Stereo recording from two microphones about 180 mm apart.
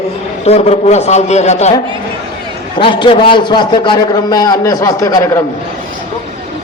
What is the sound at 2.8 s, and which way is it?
A man's voice, 30° left (ahead or behind).